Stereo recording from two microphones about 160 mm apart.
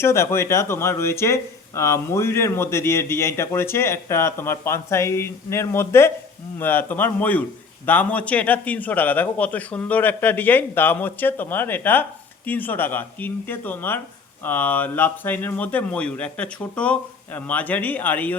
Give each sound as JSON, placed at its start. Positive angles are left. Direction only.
{"t": 0.0, "sound": "speech", "side_deg": 15}